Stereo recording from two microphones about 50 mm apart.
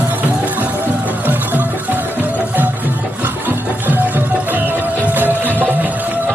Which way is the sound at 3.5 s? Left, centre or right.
Right.